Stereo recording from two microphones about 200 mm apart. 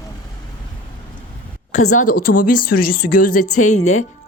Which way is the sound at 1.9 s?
40° left (ahead or behind).